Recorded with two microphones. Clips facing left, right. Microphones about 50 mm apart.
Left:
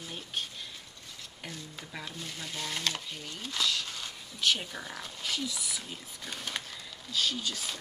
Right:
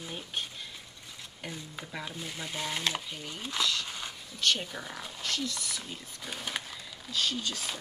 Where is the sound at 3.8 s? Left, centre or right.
Centre.